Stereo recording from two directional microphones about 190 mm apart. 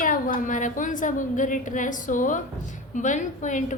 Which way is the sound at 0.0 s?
45° left (ahead or behind).